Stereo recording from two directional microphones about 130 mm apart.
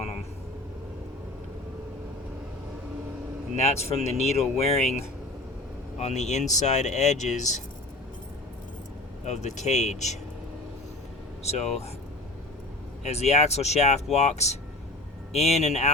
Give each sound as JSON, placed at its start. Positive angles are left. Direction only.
{"t": 3.6, "sound": "speech", "side_deg": 55}
{"t": 6.0, "sound": "speech", "side_deg": 60}
{"t": 9.2, "sound": "speech", "side_deg": 60}
{"t": 11.4, "sound": "speech", "side_deg": 55}
{"t": 13.1, "sound": "speech", "side_deg": 55}